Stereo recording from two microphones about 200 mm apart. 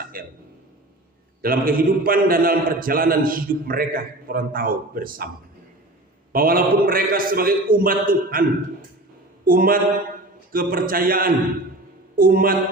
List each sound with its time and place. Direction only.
0.1 s a man's voice: 45° right (ahead or behind)
1.4 s a man's voice: 45° right (ahead or behind)
6.3 s a man's voice: 45° right (ahead or behind)